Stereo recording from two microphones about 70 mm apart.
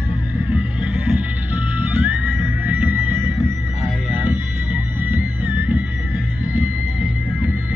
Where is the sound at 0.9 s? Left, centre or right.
Right.